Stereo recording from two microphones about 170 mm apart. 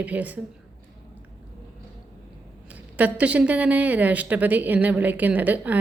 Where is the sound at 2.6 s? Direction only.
10° right (ahead or behind).